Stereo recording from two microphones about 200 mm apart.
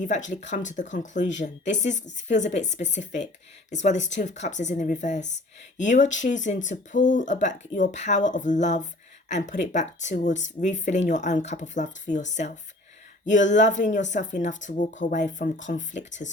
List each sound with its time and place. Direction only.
0.0 s speech: 40° left (ahead or behind)
13.5 s speech: 35° left (ahead or behind)